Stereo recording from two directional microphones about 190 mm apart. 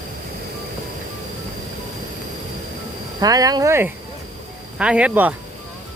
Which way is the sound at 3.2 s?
20° right (ahead or behind).